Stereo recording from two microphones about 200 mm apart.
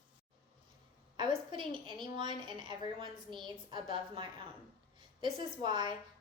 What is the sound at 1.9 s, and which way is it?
A woman's voice, 25° right (ahead or behind).